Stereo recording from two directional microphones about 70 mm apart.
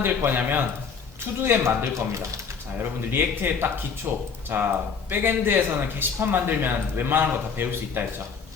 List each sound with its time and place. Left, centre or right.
0.3 s speech: right
2.7 s speech: right